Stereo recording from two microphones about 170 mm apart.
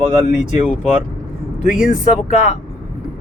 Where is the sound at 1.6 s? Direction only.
5° right (ahead or behind).